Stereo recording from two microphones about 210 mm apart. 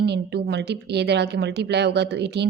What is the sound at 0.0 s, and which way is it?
Speech, 55° right (ahead or behind).